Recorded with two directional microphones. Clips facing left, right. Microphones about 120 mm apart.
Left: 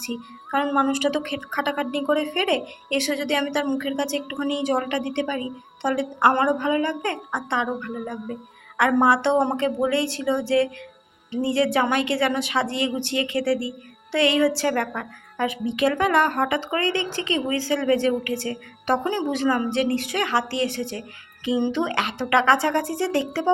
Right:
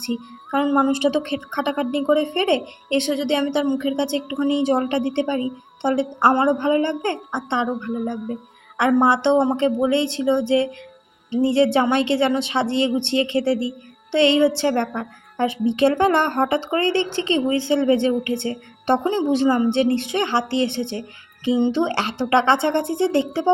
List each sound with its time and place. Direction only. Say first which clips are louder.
0.0 s a woman's voice: right 5 dB; 25° right (ahead or behind)